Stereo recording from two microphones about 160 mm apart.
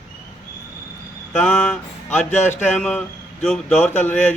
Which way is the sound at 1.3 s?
5° left (ahead or behind).